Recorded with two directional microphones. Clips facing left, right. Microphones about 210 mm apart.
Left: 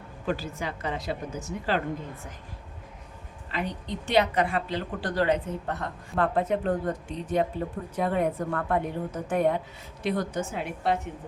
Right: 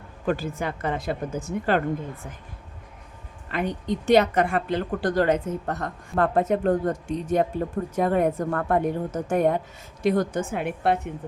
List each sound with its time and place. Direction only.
0.3 s speech: 50° right (ahead or behind)
3.5 s speech: 50° right (ahead or behind)